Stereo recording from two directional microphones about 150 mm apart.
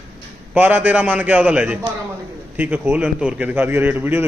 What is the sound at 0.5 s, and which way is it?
A man's voice, 10° right (ahead or behind).